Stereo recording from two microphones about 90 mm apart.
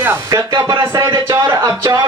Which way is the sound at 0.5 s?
50° right (ahead or behind).